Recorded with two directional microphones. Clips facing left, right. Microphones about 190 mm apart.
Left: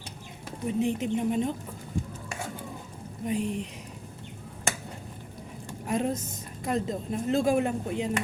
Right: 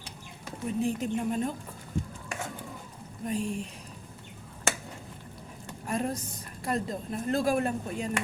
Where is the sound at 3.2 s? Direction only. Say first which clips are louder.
Left 2 dB; 20° left (ahead or behind).